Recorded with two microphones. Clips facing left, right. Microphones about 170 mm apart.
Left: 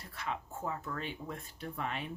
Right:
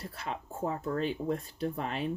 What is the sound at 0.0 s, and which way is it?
Speech, 35° right (ahead or behind).